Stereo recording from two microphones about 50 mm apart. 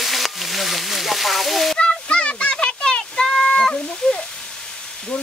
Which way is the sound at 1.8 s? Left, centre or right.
Left.